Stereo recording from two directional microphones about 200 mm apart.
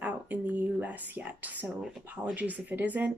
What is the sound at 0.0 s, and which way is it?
Speech, 5° right (ahead or behind).